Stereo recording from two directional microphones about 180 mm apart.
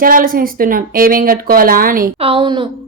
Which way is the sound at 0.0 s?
50° right (ahead or behind).